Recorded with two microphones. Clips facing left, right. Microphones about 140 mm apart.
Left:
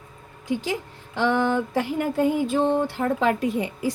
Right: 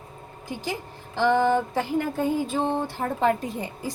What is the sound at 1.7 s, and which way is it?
A woman's voice, 75° left (ahead or behind).